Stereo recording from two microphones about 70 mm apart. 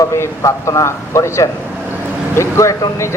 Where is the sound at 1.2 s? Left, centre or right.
Left.